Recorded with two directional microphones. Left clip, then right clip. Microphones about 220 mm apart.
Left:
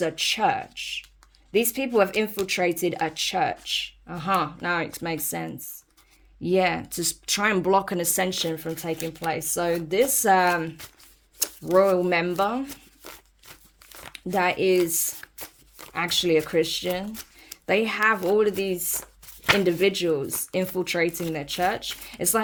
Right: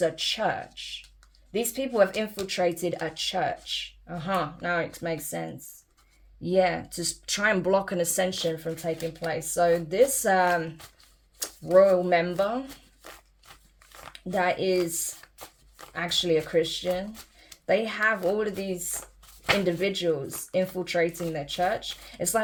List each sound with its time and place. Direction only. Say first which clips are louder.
0.0 s speech: left 3 dB; 45° left (ahead or behind)
13.5 s a sound: left 3 dB; 45° left (ahead or behind)
15.9 s speech: left 3 dB; 45° left (ahead or behind)